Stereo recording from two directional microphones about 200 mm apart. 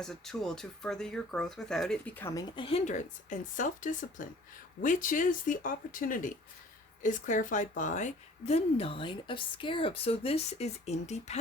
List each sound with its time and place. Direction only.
0.0 s speech: centre (ahead or behind)
2.6 s a woman's voice: 30° left (ahead or behind)